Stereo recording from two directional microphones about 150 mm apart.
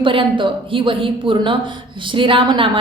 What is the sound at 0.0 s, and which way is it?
A woman's voice, 35° right (ahead or behind).